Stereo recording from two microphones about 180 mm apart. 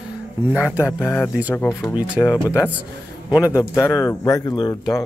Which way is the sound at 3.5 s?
15° left (ahead or behind).